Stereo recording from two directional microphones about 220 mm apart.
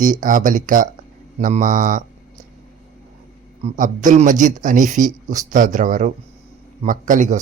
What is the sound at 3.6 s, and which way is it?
A man's voice, 35° right (ahead or behind).